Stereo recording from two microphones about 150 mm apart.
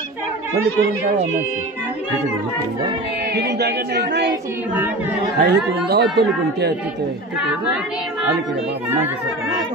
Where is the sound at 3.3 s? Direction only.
90° right.